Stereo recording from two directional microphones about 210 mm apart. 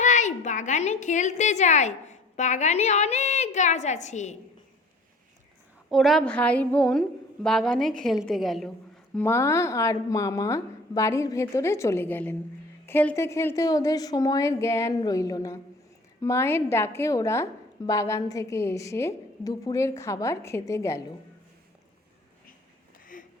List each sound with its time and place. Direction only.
0.0 s a woman's voice: 35° left (ahead or behind)
5.9 s a woman's voice: centre (ahead or behind)
9.1 s a woman's voice: 10° left (ahead or behind)
23.1 s a sound: 40° left (ahead or behind)